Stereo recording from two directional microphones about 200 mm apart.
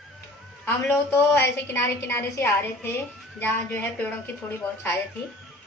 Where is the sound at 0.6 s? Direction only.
10° left (ahead or behind).